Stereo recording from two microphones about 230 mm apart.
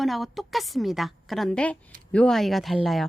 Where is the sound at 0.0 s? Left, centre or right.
Centre.